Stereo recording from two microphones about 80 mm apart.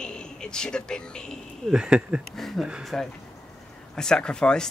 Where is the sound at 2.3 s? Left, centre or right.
Centre.